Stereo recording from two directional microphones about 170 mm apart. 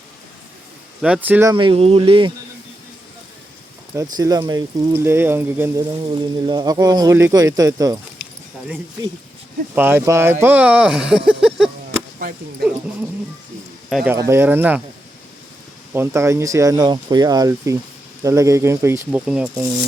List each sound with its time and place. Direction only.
1.0 s speech: 10° right (ahead or behind)
1.5 s speech: 30° right (ahead or behind)
3.9 s speech: 20° right (ahead or behind)
6.1 s speech: 25° right (ahead or behind)
9.7 s speech: 10° right (ahead or behind)
13.9 s speech: 5° right (ahead or behind)
15.9 s speech: 15° right (ahead or behind)